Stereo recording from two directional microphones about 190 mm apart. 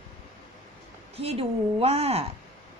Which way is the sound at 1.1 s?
30° right (ahead or behind).